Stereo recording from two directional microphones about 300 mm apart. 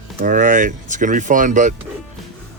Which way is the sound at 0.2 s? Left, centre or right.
Right.